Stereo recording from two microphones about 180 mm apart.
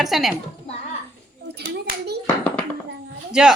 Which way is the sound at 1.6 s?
65° right (ahead or behind).